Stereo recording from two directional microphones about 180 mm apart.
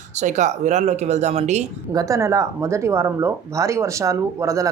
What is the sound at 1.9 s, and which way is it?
Speech, 20° right (ahead or behind).